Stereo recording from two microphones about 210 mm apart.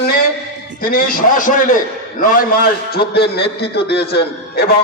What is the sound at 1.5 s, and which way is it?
A man's voice, 40° left (ahead or behind).